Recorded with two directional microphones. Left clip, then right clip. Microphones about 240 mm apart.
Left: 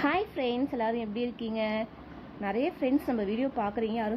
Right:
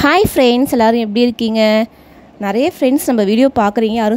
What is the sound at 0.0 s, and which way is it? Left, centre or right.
A woman's voice, right.